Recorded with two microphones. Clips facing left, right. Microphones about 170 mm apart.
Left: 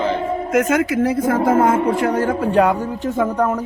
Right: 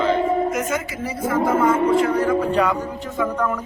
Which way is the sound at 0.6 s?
70° left (ahead or behind).